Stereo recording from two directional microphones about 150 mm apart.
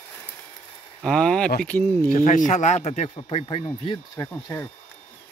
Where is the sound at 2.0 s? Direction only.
65° left (ahead or behind).